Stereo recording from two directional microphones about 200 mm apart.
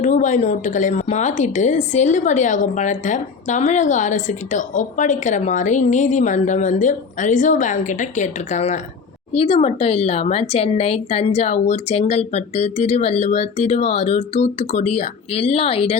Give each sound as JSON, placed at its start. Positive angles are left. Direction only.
{"t": 0.0, "sound": "a woman's voice", "side_deg": 40}